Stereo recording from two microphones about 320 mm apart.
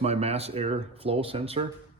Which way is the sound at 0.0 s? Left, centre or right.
Centre.